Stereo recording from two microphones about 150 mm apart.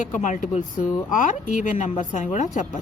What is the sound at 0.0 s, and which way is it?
Speech, 60° left (ahead or behind).